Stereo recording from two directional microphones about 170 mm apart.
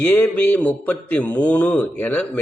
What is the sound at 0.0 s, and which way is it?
A man's voice, 10° left (ahead or behind).